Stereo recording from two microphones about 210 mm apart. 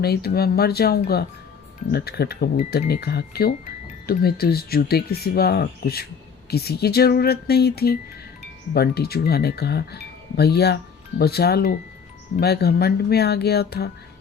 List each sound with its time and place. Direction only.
0.0 s speech: 50° left (ahead or behind)